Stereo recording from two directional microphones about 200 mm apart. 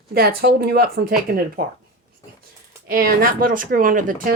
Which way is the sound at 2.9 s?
50° right (ahead or behind).